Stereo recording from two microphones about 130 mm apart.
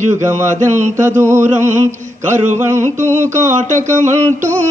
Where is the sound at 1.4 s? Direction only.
65° right (ahead or behind).